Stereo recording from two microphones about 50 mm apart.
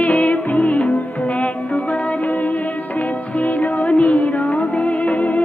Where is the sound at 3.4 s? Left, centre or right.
Left.